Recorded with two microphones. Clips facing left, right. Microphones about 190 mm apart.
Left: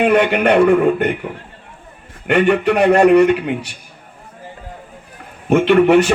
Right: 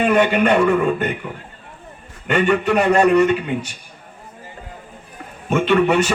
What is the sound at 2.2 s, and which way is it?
A man's voice, 60° left (ahead or behind).